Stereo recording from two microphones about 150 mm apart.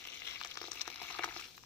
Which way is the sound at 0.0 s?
15° left (ahead or behind).